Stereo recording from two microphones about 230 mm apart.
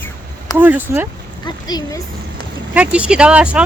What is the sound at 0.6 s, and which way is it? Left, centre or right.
Speech, centre.